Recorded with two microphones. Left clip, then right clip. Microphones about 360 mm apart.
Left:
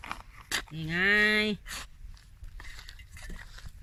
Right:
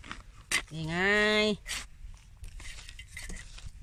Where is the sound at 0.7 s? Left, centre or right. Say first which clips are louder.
Left 3 dB; centre.